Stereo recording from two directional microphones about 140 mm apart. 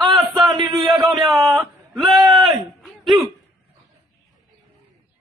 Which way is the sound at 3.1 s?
25° right (ahead or behind).